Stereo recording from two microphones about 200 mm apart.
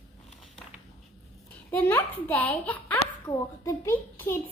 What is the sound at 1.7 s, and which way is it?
A child's voice, 10° left (ahead or behind).